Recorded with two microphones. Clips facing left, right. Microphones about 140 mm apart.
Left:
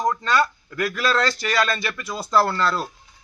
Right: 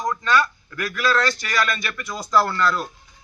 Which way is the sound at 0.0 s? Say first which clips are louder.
Even; 30° left (ahead or behind).